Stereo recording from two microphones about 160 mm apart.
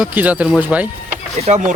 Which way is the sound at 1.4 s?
45° right (ahead or behind).